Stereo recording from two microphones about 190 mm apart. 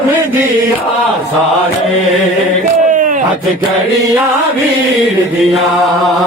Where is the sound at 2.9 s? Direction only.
45° right (ahead or behind).